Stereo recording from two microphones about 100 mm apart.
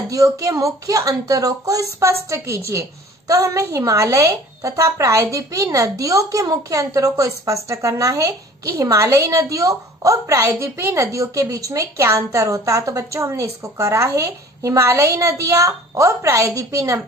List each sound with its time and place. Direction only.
0.1 s a woman's voice: 35° right (ahead or behind)